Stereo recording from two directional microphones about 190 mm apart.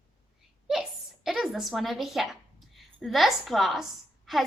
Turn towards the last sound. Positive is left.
turn(degrees=0)  # may be behind; listen again after turning